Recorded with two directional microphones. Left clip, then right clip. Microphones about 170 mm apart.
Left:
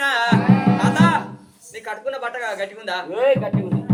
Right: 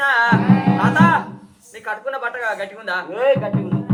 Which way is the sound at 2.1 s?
20° left (ahead or behind).